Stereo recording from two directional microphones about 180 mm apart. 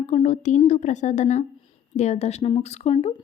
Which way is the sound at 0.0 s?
40° left (ahead or behind).